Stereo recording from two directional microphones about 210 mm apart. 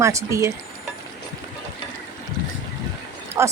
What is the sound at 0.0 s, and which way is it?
Speech, 15° right (ahead or behind).